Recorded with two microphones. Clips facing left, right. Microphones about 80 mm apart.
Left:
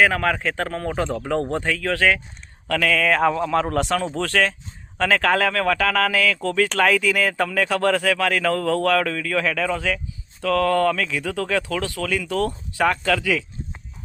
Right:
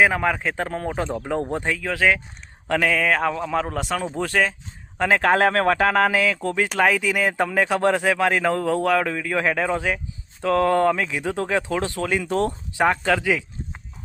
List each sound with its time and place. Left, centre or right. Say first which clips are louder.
0.0 s a man's voice: even; centre
3.1 s speech: left 3 dB; centre; by 13.4 s right